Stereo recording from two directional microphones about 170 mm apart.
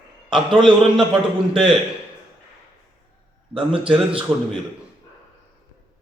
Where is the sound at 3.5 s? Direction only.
30° right (ahead or behind).